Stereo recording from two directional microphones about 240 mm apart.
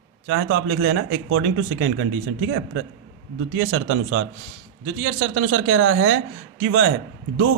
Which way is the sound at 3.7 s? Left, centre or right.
Right.